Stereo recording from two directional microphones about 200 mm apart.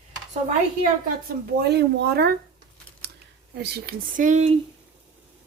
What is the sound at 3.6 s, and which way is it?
Speech, 45° right (ahead or behind).